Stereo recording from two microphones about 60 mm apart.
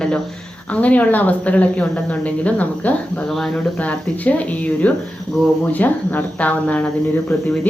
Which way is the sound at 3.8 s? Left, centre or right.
Left.